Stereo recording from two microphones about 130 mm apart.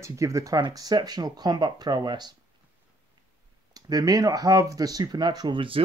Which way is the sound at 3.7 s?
30° right (ahead or behind).